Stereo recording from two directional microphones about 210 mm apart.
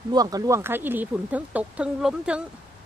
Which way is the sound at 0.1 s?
20° right (ahead or behind).